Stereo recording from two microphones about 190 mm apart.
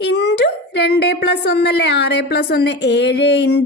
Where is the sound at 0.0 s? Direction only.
70° left (ahead or behind).